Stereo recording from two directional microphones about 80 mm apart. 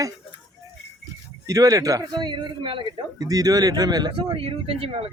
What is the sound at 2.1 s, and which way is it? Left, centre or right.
Speech, right.